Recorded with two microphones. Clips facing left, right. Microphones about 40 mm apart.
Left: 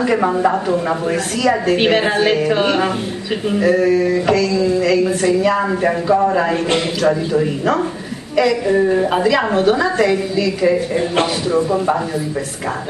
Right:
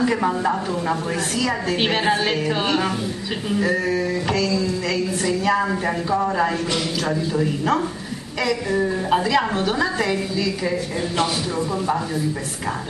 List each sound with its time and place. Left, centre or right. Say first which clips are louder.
0.0 s a woman's voice: left 5 dB; centre
5.2 s a woman's voice: left 5 dB; centre
8.6 s speech: left 7 dB; left
9.1 s a woman's voice: left 4 dB; centre
10.6 s speech: left 8 dB; left